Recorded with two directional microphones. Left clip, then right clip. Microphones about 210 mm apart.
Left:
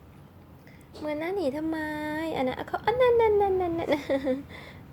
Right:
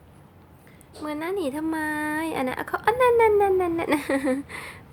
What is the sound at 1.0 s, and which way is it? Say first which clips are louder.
Speech: right 1 dB; 5° right (ahead or behind).